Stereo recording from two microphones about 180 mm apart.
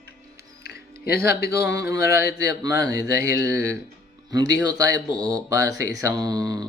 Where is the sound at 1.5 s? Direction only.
20° right (ahead or behind).